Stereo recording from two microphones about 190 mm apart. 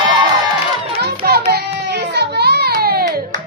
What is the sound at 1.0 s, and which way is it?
Music, 55° right (ahead or behind).